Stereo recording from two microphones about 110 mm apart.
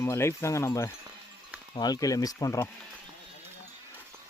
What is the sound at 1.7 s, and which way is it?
Speech, 40° left (ahead or behind).